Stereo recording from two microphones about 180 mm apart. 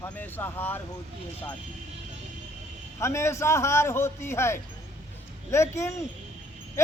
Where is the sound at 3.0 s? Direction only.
15° left (ahead or behind).